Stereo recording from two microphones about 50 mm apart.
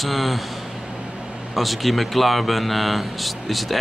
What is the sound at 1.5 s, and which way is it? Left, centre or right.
Speech, centre.